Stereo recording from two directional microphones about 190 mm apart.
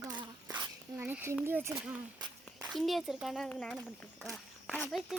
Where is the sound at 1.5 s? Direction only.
15° right (ahead or behind).